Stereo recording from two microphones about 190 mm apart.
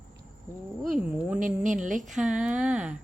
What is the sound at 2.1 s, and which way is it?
Speech, 5° right (ahead or behind).